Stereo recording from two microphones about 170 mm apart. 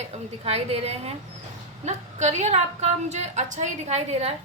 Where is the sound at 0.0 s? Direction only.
40° right (ahead or behind).